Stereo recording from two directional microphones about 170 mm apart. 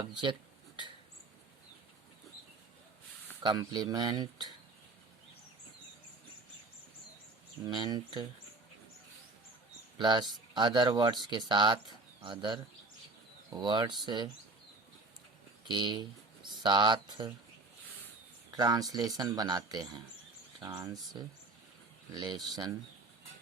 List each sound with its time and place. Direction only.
0.0 s speech: 30° right (ahead or behind)
3.4 s speech: 25° right (ahead or behind)
7.6 s speech: 25° right (ahead or behind)
10.0 s speech: 25° right (ahead or behind)
15.6 s speech: 25° right (ahead or behind)
18.5 s speech: 25° right (ahead or behind)